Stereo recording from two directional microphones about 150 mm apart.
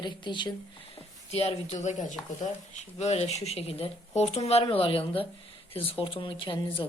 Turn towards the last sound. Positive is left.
turn(degrees=35)  # may be behind; listen again after turning